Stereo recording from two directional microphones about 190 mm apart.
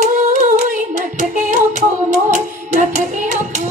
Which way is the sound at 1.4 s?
40° right (ahead or behind).